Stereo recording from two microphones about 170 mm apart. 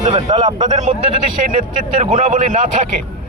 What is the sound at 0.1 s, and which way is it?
Speech, 25° right (ahead or behind).